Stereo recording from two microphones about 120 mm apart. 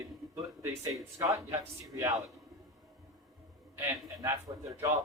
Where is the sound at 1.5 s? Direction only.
25° right (ahead or behind).